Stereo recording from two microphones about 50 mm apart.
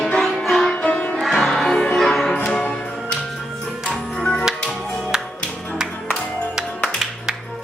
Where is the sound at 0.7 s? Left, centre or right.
Left.